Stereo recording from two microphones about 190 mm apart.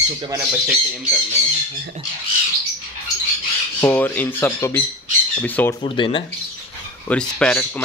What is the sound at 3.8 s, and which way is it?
Speech, 10° left (ahead or behind).